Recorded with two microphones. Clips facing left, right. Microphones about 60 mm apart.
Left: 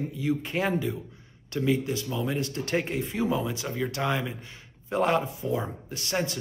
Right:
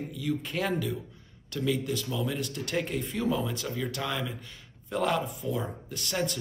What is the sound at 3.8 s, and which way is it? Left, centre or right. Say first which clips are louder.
A man's voice: left 6 dB; left.